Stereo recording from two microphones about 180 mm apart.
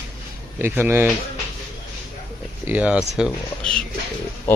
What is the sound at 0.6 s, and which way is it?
Speech, 10° right (ahead or behind).